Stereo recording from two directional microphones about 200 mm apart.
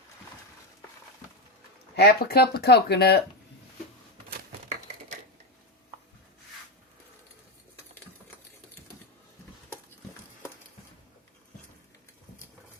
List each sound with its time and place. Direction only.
2.0 s speech: 50° left (ahead or behind)